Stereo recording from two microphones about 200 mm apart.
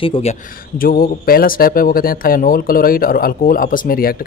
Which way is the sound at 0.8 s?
45° left (ahead or behind).